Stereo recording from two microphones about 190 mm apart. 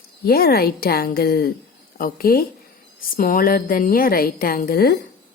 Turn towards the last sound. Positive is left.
turn(degrees=55)  # may be behind; listen again after turning